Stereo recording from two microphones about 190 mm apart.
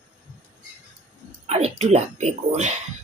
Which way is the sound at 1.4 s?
35° right (ahead or behind).